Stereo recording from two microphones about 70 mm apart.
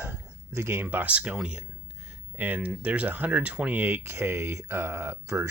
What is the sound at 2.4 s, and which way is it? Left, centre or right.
Speech, right.